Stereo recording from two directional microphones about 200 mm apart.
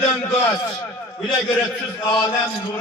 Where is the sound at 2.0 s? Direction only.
20° left (ahead or behind).